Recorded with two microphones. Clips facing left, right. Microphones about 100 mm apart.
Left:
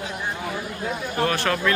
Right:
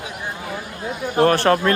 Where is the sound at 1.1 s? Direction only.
35° right (ahead or behind).